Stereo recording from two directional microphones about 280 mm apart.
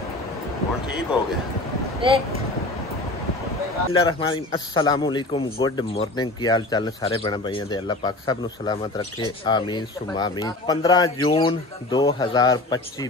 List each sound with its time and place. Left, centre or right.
2.0 s speech: centre
3.9 s a man's voice: centre